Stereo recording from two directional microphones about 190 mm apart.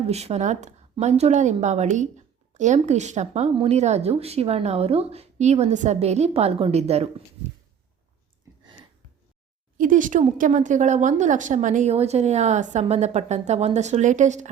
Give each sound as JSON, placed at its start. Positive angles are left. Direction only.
{"t": 0.1, "sound": "a woman's voice", "side_deg": -35}
{"t": 9.7, "sound": "a woman's voice", "side_deg": -45}